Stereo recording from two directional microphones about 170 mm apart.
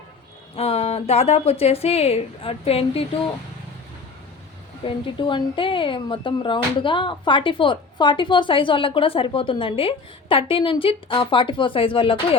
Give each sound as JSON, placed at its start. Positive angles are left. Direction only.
{"t": 0.5, "sound": "a woman's voice", "side_deg": 35}
{"t": 4.9, "sound": "speech", "side_deg": 30}